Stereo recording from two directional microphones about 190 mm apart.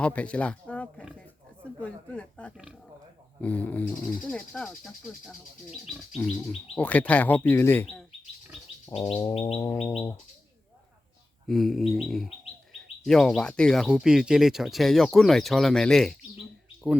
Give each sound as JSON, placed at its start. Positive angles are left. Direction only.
{"t": 0.0, "sound": "a sound", "side_deg": 5}
{"t": 1.8, "sound": "speech", "side_deg": 5}
{"t": 8.9, "sound": "bird", "side_deg": 30}
{"t": 11.4, "sound": "speech", "side_deg": 0}